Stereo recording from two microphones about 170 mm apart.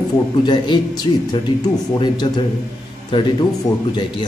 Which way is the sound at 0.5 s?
25° left (ahead or behind).